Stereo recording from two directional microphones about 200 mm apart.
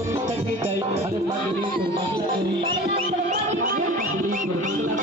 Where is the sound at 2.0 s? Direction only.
30° right (ahead or behind).